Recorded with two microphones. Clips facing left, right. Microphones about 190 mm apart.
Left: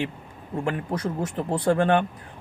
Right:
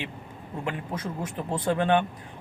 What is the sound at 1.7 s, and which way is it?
Speech, 45° left (ahead or behind).